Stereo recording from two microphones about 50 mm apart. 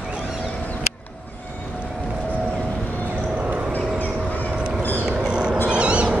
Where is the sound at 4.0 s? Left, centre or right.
Left.